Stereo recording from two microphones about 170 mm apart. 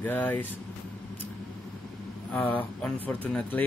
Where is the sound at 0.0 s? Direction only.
10° left (ahead or behind).